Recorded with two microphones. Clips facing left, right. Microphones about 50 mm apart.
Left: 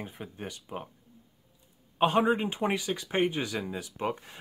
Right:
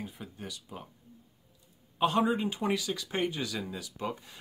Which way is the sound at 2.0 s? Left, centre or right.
Left.